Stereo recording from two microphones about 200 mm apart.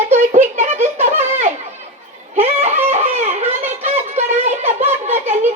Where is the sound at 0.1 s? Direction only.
35° right (ahead or behind).